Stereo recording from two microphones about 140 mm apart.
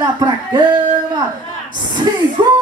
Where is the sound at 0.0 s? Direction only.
30° right (ahead or behind).